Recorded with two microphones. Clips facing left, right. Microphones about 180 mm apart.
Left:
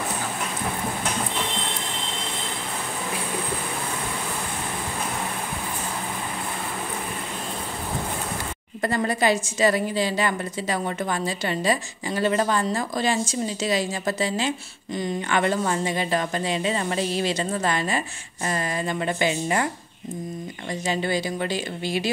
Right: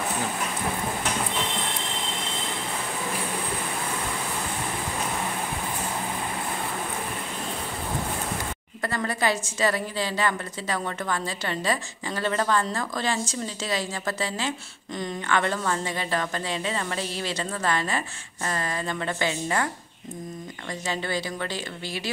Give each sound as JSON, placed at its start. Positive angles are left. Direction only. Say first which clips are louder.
{"t": 8.8, "sound": "a woman's voice", "louder": "left 4 dB", "side_deg": 20}
{"t": 20.8, "sound": "a woman's voice", "louder": "left 4 dB", "side_deg": 15}